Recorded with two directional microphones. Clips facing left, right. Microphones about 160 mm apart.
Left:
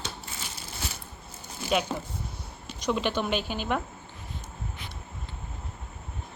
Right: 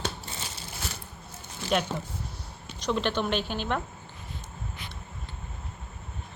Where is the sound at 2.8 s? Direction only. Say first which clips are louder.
Even; 10° left (ahead or behind).